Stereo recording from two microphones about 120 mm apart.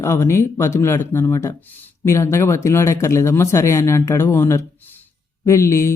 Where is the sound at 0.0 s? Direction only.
25° left (ahead or behind).